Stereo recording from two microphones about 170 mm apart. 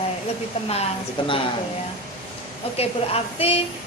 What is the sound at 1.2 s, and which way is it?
Speech, 30° left (ahead or behind).